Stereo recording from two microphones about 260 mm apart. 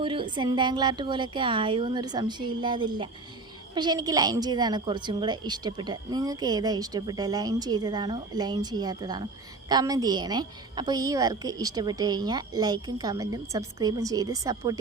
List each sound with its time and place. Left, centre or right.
0.0 s a woman's voice: centre